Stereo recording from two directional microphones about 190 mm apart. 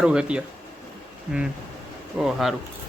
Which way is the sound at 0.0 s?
5° right (ahead or behind).